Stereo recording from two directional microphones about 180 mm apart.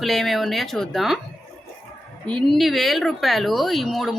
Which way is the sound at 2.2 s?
5° left (ahead or behind).